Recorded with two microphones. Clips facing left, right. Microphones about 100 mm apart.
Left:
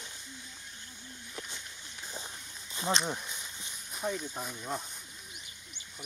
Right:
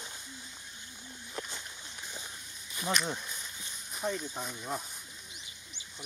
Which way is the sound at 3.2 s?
20° left (ahead or behind).